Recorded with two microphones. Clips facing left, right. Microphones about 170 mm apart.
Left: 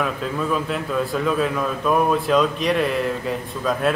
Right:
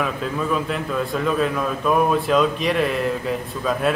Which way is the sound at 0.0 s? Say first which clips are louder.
Even; centre (ahead or behind).